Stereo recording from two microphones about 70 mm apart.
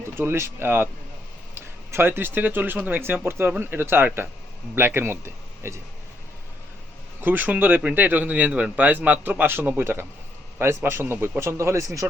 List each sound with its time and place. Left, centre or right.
0.2 s a man's voice: right
7.2 s a man's voice: right